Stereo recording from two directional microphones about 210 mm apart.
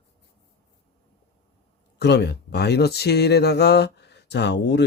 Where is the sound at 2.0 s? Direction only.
55° left (ahead or behind).